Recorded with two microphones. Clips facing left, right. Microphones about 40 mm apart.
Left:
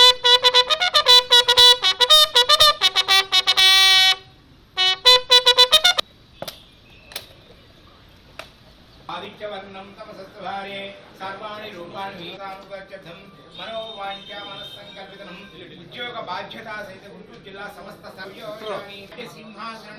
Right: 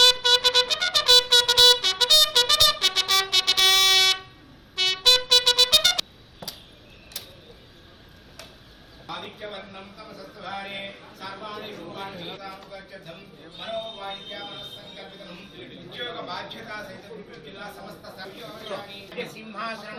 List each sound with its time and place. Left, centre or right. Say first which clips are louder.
0.0 s trumpet: left 5 dB; left
5.3 s music: left 5 dB; left
7.1 s printer: left 5 dB; left
8.4 s a sound: left 7 dB; left
12.9 s speech: left 3 dB; left
15.5 s a man's voice: left 1 dB; centre
15.9 s speech: left 4 dB; left
19.1 s speech: right 2 dB; right